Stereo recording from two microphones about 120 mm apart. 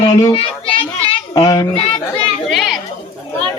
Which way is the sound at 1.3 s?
30° left (ahead or behind).